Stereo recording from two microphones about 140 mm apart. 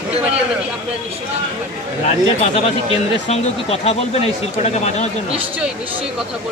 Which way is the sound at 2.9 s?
45° left (ahead or behind).